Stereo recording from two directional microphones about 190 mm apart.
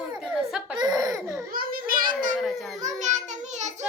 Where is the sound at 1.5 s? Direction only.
50° right (ahead or behind).